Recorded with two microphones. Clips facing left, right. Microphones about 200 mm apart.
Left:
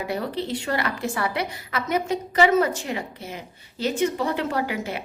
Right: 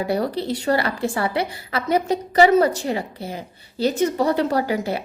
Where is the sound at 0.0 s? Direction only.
35° right (ahead or behind).